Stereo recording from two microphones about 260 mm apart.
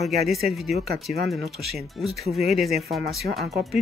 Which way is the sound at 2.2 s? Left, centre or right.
Centre.